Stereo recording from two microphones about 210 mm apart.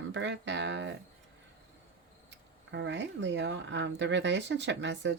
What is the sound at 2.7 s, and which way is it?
Speech, 60° right (ahead or behind).